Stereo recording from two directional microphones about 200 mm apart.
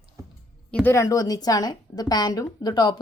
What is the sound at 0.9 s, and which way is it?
A woman's voice, 15° left (ahead or behind).